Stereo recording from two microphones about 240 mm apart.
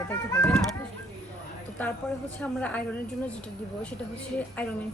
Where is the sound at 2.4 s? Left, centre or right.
Centre.